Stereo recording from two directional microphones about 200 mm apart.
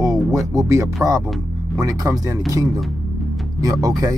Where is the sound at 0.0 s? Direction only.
15° right (ahead or behind).